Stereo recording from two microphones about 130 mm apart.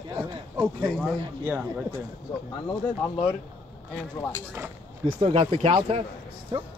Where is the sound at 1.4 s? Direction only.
15° right (ahead or behind).